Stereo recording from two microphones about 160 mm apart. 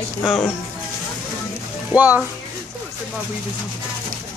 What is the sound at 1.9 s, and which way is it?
Speech, 10° right (ahead or behind).